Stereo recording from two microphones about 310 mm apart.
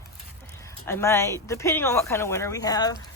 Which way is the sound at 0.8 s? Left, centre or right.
Centre.